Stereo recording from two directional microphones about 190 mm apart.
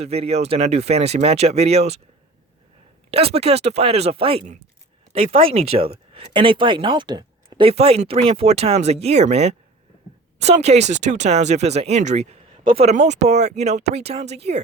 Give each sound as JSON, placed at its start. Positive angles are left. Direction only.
{"t": 0.0, "sound": "speech", "side_deg": -30}
{"t": 3.1, "sound": "speech", "side_deg": -30}